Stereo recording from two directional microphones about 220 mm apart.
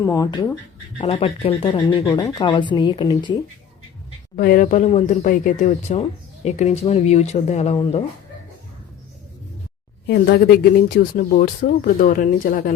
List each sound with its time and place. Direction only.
0.0 s speech: 15° left (ahead or behind)
4.4 s speech: 40° left (ahead or behind)
10.1 s speech: 45° left (ahead or behind)